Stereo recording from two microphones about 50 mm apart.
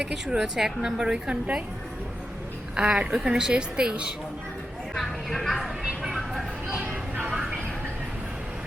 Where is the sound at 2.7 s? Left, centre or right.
Centre.